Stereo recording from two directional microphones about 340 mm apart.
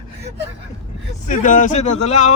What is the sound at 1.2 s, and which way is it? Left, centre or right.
Speech, left.